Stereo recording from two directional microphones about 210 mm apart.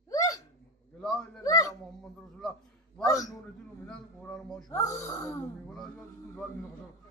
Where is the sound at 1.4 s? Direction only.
15° left (ahead or behind).